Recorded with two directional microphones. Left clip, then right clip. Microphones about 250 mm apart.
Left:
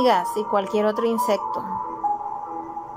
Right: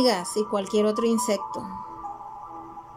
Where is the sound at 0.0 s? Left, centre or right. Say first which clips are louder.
Left 4 dB; centre.